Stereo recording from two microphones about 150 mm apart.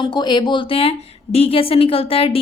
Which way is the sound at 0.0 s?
30° left (ahead or behind).